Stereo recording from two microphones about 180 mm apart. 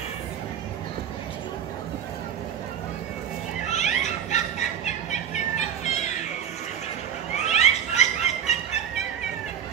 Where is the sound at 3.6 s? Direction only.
40° left (ahead or behind).